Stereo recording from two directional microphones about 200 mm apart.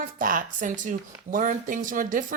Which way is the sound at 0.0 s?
45° right (ahead or behind).